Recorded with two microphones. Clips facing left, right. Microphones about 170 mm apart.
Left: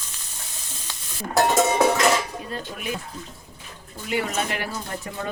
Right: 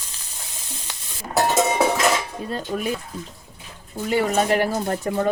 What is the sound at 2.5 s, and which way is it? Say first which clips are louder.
Speech: right 7 dB; 35° right (ahead or behind).